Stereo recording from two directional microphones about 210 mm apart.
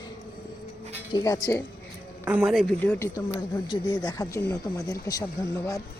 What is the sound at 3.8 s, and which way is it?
Speech, 20° left (ahead or behind).